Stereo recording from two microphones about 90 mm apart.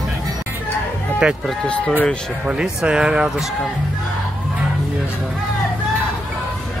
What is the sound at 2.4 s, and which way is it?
Speech, 10° right (ahead or behind).